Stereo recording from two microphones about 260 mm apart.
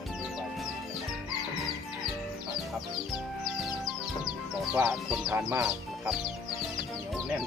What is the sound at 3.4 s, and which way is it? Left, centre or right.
Music, centre.